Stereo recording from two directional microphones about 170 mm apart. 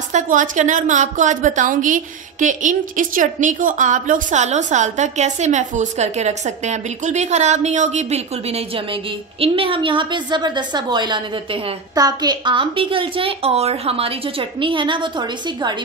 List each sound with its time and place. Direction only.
0.1 s a woman's voice: 45° right (ahead or behind); by 15.7 s 25° right (ahead or behind)